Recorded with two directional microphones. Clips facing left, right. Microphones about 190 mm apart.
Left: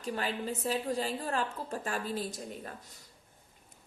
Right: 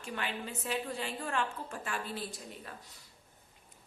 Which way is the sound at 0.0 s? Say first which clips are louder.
Left 4 dB; 35° left (ahead or behind).